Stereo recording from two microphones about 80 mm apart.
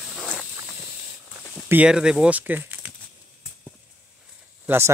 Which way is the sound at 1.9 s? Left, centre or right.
Centre.